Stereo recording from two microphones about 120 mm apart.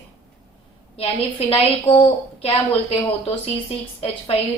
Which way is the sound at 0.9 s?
55° left (ahead or behind).